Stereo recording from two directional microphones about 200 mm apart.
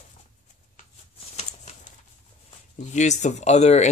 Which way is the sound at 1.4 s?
35° left (ahead or behind).